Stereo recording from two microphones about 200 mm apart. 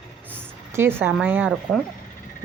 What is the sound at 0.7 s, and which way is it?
Speech, 10° right (ahead or behind).